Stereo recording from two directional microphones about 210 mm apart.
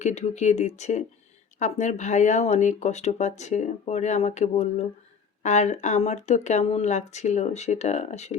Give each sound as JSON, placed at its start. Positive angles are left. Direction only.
{"t": 0.0, "sound": "speech", "side_deg": 35}